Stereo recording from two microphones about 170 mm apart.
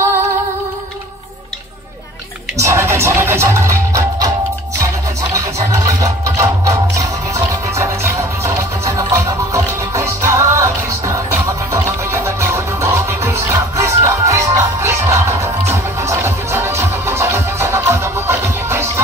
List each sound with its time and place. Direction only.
2.5 s music: 15° right (ahead or behind)
5.3 s music: 20° right (ahead or behind)